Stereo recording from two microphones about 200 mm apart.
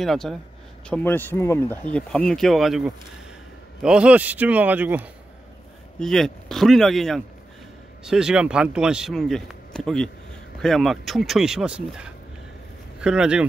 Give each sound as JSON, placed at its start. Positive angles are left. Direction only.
{"t": 0.0, "sound": "a man's voice", "side_deg": 0}
{"t": 5.9, "sound": "speech", "side_deg": 0}